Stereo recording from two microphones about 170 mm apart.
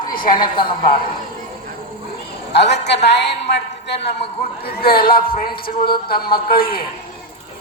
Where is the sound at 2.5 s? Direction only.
85° left; by 6.8 s 60° left (ahead or behind).